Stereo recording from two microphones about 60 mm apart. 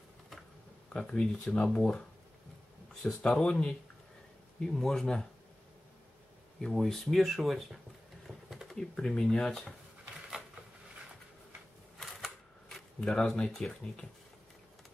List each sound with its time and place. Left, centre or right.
0.9 s speech: centre
3.2 s speech: centre
6.6 s speech: centre
8.5 s typing: centre
8.7 s speech: centre
13.0 s speech: centre